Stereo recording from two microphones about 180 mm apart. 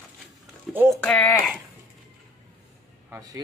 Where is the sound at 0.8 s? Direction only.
5° left (ahead or behind).